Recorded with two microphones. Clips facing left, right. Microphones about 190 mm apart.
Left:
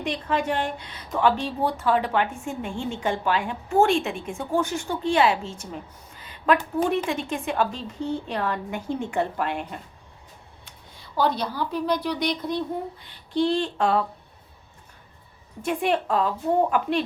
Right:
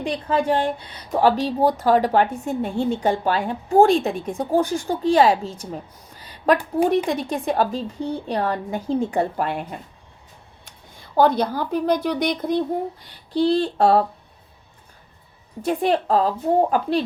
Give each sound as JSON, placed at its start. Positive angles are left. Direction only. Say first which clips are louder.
{"t": 0.0, "sound": "a woman's voice", "louder": "right 4 dB", "side_deg": -35}
{"t": 10.7, "sound": "speech", "louder": "right 3 dB", "side_deg": -50}
{"t": 13.3, "sound": "a woman's voice", "louder": "right 4 dB", "side_deg": -35}
{"t": 15.6, "sound": "a woman's voice", "louder": "right 4 dB", "side_deg": -35}